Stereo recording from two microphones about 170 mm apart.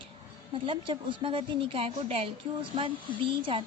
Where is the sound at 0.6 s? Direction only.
30° right (ahead or behind).